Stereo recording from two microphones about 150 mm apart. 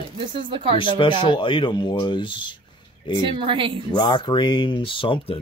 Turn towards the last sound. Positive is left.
turn(degrees=35)  # may be behind; listen again after turning